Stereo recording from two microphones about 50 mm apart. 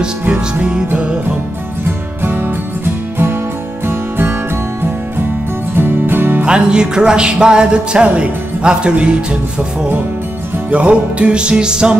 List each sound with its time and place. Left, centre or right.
0.7 s music: centre
1.9 s music: right
5.8 s music: right
6.4 s music: centre